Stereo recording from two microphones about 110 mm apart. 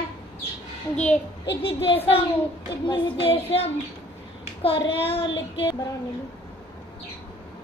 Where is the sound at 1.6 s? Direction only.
55° left (ahead or behind).